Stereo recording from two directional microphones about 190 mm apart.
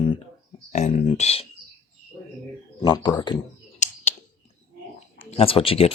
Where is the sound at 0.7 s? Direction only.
35° left (ahead or behind).